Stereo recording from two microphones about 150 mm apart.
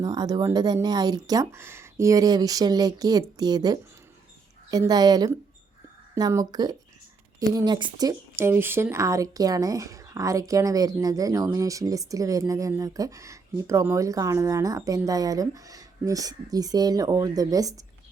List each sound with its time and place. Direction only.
0.0 s speech: 25° right (ahead or behind)